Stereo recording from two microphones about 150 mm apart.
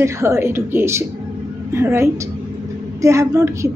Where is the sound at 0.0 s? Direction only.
20° right (ahead or behind).